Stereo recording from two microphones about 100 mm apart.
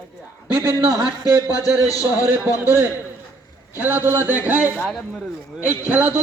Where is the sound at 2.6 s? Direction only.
20° right (ahead or behind).